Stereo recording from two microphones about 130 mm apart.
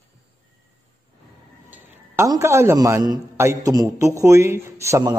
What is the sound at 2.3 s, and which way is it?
A man's voice, 20° right (ahead or behind).